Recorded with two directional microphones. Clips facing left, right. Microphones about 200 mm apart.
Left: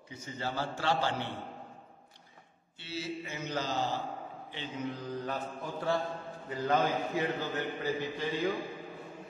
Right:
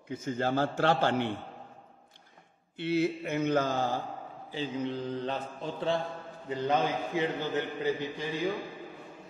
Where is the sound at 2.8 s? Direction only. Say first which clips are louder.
Right 10 dB; 55° right (ahead or behind).